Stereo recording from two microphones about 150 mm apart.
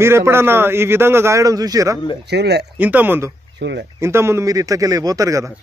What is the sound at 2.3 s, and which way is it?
Speech, 90° right.